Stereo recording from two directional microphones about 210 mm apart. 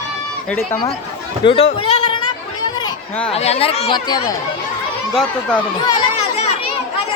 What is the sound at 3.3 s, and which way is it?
Speech, 30° left (ahead or behind).